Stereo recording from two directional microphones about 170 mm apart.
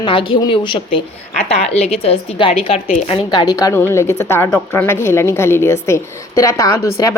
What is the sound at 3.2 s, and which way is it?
A woman's voice, 25° left (ahead or behind).